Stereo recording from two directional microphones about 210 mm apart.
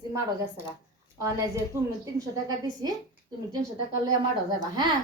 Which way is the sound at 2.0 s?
15° right (ahead or behind).